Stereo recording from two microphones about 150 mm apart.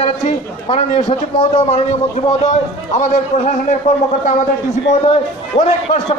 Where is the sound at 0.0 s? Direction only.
45° left (ahead or behind).